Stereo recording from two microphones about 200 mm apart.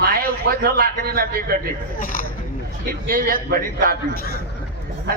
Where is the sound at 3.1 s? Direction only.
45° right (ahead or behind).